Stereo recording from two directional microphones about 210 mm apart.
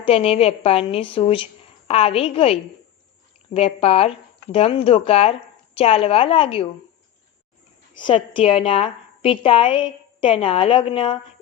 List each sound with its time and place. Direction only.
0.0 s a woman's voice: 30° left (ahead or behind)
7.9 s a woman's voice: 25° left (ahead or behind)